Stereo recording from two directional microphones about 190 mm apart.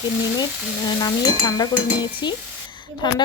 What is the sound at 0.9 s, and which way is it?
A woman's voice, 20° left (ahead or behind).